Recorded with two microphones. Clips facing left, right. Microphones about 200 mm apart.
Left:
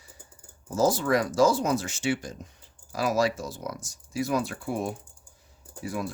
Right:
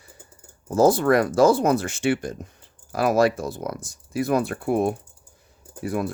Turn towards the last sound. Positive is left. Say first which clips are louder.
# right 6 dB
turn(degrees=-55)  # may be behind; listen again after turning